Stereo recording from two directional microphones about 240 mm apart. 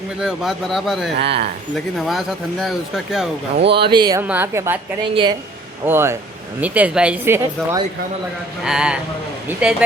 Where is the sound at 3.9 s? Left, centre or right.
Centre.